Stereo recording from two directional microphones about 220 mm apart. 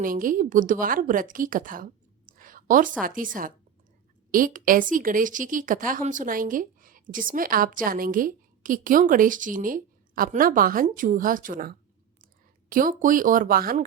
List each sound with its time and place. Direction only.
0.0 s a woman's voice: 40° right (ahead or behind)
4.3 s a woman's voice: 40° right (ahead or behind)